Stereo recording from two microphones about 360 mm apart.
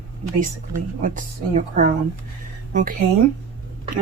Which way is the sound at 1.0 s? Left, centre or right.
Right.